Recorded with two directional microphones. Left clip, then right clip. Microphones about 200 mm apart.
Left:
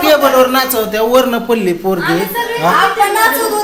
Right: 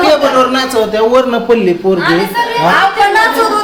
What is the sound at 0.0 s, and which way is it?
A man's voice, 20° left (ahead or behind).